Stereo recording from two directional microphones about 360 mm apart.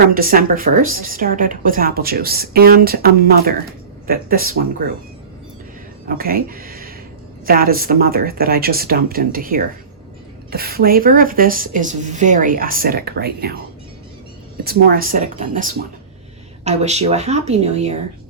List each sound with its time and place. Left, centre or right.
0.1 s speech: right
6.1 s speech: right
14.6 s speech: right